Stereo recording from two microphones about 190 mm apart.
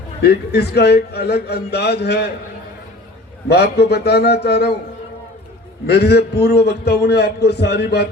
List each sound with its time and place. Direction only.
0.2 s a man's voice: 60° left (ahead or behind)
3.5 s a man's voice: 60° left (ahead or behind)
5.8 s a man's voice: 60° left (ahead or behind)